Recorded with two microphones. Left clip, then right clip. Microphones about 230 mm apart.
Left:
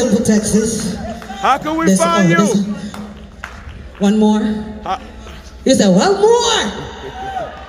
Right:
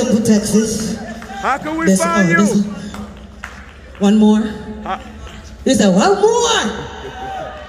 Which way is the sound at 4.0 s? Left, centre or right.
Left.